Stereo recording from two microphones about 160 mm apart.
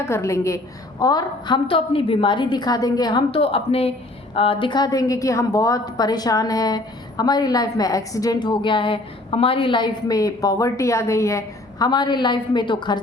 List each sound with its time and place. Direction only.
0.0 s a woman's voice: 20° left (ahead or behind)